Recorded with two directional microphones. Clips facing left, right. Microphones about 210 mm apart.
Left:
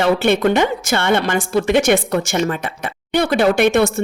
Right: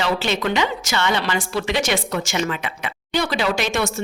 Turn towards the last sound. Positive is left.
turn(degrees=55)  # may be behind; listen again after turning